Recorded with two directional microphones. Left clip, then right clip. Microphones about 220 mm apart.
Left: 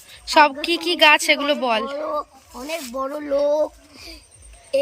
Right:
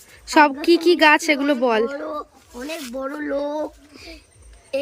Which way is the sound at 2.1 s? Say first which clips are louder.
Left 4 dB; 10° left (ahead or behind).